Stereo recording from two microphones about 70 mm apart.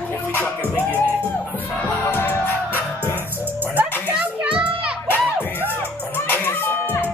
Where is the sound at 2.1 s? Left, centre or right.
Left.